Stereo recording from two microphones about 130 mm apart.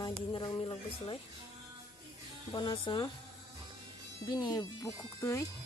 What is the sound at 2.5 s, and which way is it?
Speech, 35° left (ahead or behind).